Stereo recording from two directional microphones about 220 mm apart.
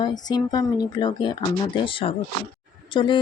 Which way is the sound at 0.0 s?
20° left (ahead or behind).